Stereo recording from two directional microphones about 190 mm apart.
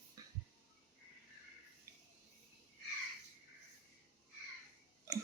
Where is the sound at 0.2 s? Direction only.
20° right (ahead or behind).